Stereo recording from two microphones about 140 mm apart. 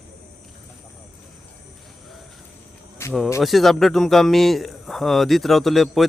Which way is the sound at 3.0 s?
20° left (ahead or behind).